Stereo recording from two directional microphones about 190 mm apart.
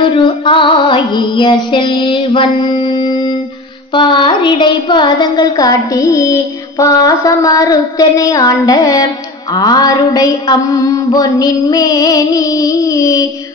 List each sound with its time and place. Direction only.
0.0 s child singing: 25° left (ahead or behind)